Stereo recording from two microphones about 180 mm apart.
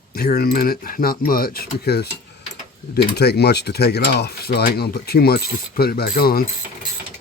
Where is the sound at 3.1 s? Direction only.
65° left (ahead or behind).